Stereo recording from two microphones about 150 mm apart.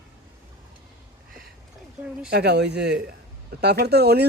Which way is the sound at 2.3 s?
90° right.